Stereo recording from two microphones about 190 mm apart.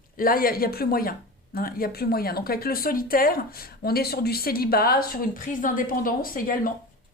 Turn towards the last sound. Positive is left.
turn(degrees=50)  # may be behind; listen again after turning